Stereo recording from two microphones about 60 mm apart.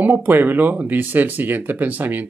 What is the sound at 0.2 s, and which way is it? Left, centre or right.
Speech, right.